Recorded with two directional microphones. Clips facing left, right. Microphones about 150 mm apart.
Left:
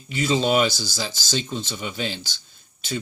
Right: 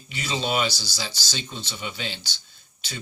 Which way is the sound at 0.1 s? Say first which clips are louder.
Left 7 dB; 45° left (ahead or behind).